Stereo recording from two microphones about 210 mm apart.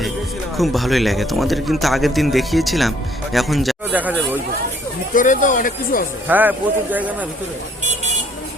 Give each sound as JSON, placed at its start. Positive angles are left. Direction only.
{"t": 0.5, "sound": "speech", "side_deg": 0}
{"t": 5.1, "sound": "speech", "side_deg": 40}
{"t": 6.2, "sound": "speech", "side_deg": -10}